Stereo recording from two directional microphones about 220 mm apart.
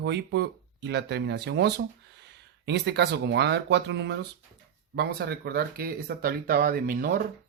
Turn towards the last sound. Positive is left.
turn(degrees=-40)  # may be behind; listen again after turning